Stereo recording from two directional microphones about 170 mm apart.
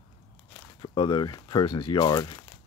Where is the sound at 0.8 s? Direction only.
25° left (ahead or behind).